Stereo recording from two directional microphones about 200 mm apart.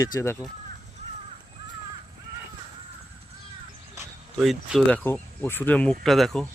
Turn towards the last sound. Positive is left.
turn(degrees=0)  # may be behind; listen again after turning